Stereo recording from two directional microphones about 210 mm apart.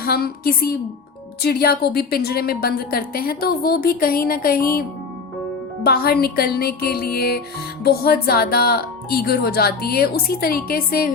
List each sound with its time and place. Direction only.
0.0 s a woman's voice: 45° left (ahead or behind)
5.8 s a woman's voice: 45° left (ahead or behind)